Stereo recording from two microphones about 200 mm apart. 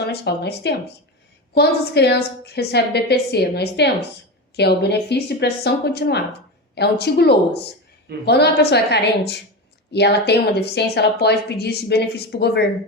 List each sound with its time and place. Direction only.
0.0 s speech: 55° left (ahead or behind)